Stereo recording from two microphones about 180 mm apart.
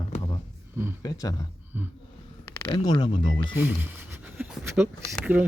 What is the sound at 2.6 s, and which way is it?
Speech, 25° left (ahead or behind).